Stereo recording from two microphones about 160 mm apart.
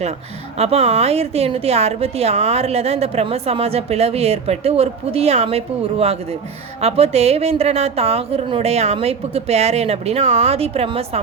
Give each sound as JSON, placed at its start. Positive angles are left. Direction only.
{"t": 0.5, "sound": "a woman's voice", "side_deg": -40}